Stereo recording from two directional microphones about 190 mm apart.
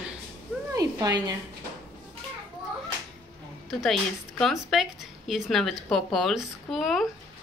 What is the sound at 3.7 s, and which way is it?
Speech, centre (ahead or behind).